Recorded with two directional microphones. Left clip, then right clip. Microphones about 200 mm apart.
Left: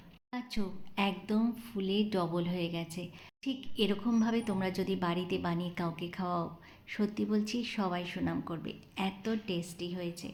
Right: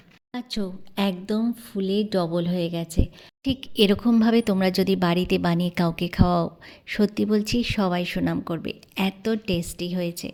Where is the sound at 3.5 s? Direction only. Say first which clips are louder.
Right 12 dB; 50° right (ahead or behind).